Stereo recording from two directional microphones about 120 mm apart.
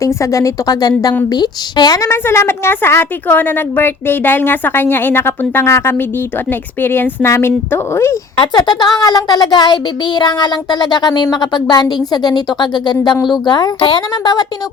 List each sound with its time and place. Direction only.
0.0 s a woman's voice: 25° left (ahead or behind)
8.4 s child singing: 40° left (ahead or behind)